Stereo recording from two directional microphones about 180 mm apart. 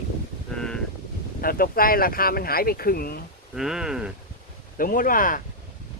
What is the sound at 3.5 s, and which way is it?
Speech, centre (ahead or behind).